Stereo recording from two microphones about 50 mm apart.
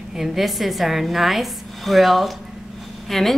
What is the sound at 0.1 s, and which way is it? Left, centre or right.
A woman's voice, centre.